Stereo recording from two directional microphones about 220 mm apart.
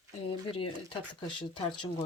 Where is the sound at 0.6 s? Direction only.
20° left (ahead or behind).